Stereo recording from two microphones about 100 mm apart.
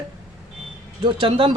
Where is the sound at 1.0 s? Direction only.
60° right (ahead or behind).